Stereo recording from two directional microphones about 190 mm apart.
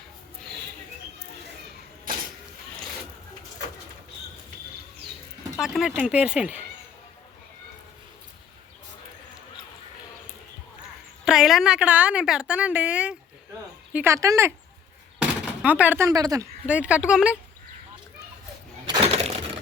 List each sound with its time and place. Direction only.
5.5 s a woman's voice: centre (ahead or behind)
11.3 s a woman's voice: centre (ahead or behind); by 16.5 s 20° right (ahead or behind)
16.6 s speech: 5° right (ahead or behind)
18.9 s a sound: 35° right (ahead or behind)